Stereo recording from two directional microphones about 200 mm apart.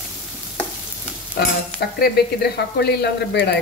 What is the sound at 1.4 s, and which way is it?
Stir, 55° left (ahead or behind).